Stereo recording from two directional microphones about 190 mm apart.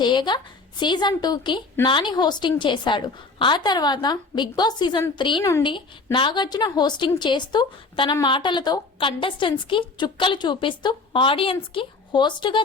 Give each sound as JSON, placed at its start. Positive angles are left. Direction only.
{"t": 0.0, "sound": "a woman's voice", "side_deg": 25}